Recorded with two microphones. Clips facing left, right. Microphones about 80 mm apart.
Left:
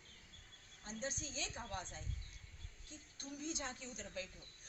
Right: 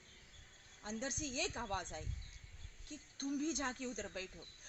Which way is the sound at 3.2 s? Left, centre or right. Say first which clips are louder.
Right 7 dB; right.